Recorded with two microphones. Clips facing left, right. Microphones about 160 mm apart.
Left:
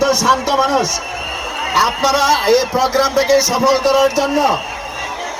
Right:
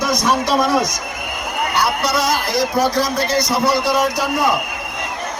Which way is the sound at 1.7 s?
90° left.